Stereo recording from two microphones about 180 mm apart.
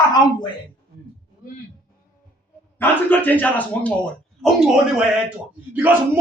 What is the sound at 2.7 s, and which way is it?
Speech, 10° left (ahead or behind).